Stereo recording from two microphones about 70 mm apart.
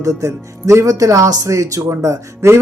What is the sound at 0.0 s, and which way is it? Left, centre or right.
Speech, right.